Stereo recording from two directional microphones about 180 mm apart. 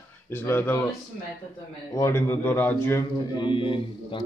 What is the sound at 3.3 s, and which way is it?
Speech, 30° left (ahead or behind).